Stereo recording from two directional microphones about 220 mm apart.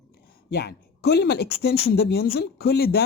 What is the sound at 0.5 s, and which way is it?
A woman's voice, 50° left (ahead or behind).